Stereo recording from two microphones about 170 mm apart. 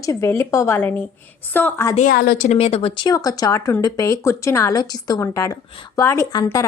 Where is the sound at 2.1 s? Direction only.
65° left (ahead or behind).